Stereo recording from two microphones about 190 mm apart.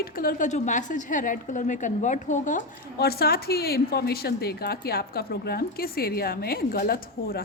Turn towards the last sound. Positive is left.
turn(degrees=50)  # may be behind; listen again after turning